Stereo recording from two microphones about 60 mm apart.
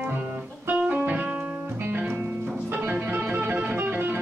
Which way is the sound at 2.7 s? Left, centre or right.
Right.